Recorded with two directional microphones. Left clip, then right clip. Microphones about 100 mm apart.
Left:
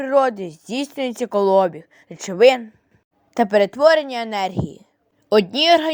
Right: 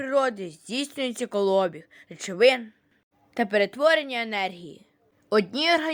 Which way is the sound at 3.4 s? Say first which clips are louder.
Left 7 dB; 40° left (ahead or behind).